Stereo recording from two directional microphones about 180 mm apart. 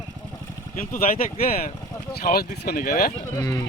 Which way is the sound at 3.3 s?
15° left (ahead or behind).